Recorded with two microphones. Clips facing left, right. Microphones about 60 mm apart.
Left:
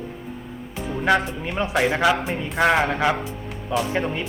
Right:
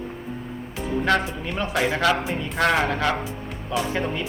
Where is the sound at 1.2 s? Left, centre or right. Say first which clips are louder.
Left 2 dB; centre.